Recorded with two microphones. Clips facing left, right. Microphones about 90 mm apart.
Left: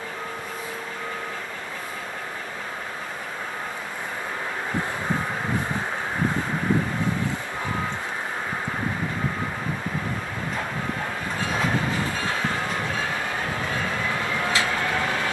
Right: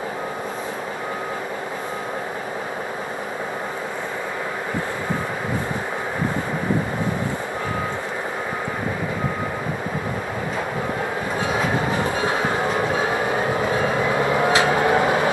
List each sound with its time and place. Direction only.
12.0 s train: 20° right (ahead or behind)